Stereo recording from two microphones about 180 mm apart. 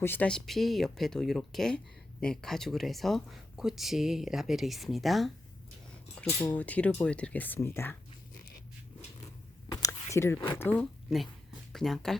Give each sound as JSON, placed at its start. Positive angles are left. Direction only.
{"t": 0.0, "sound": "speech", "side_deg": 10}
{"t": 6.4, "sound": "speech", "side_deg": 10}
{"t": 9.6, "sound": "a sound", "side_deg": 20}
{"t": 10.6, "sound": "speech", "side_deg": 10}